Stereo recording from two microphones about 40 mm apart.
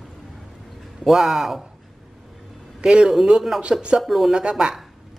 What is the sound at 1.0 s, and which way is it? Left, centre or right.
Speech, centre.